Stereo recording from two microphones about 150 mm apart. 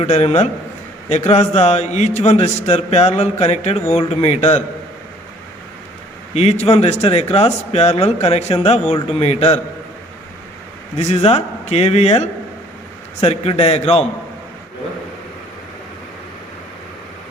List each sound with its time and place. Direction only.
0.0 s a man's voice: 45° left (ahead or behind)
6.3 s a man's voice: 45° left (ahead or behind)
10.9 s a man's voice: 45° left (ahead or behind)